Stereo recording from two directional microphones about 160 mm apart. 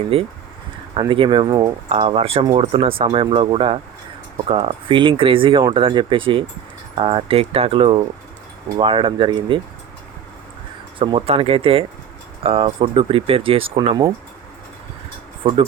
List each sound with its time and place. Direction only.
0.0 s speech: 35° right (ahead or behind)
11.0 s speech: 35° right (ahead or behind)